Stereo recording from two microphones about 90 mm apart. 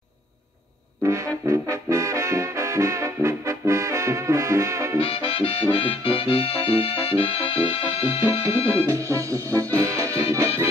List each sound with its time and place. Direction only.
1.0 s trombone: 35° right (ahead or behind)
5.0 s music: 90° left
8.2 s music: 35° right (ahead or behind)